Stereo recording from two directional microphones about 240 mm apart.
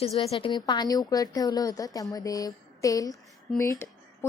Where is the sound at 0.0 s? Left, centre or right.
Left.